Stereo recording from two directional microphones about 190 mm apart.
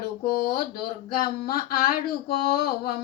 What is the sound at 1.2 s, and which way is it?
Speech, 50° left (ahead or behind).